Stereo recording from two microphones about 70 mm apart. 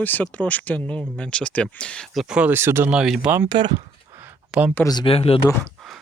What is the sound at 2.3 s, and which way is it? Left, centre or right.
Speech, centre.